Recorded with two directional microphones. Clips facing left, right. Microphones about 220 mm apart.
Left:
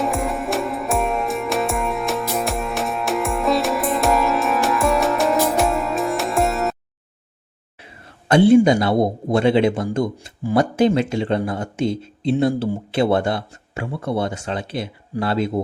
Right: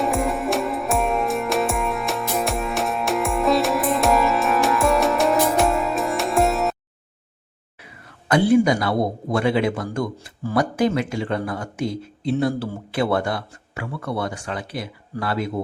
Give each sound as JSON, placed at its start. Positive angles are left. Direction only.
{"t": 0.0, "sound": "music", "side_deg": 0}
{"t": 7.8, "sound": "a man's voice", "side_deg": 25}